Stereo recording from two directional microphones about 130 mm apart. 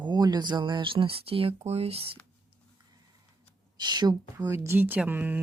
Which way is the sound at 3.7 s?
35° right (ahead or behind).